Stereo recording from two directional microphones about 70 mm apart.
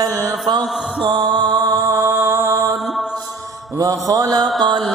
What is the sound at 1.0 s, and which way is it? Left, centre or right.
Music, right.